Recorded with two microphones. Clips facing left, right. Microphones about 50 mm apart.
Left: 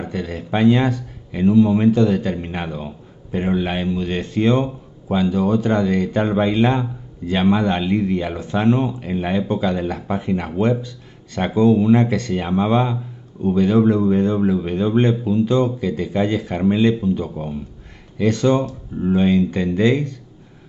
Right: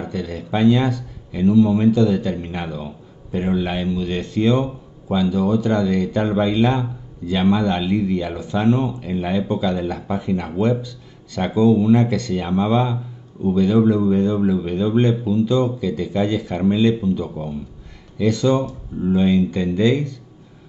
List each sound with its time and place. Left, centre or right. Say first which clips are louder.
0.1 s a man's voice: left 1 dB; left
18.1 s a man's voice: left 1 dB; left